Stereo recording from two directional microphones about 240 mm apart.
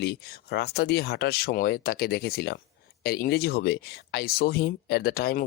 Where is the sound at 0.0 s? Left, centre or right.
Left.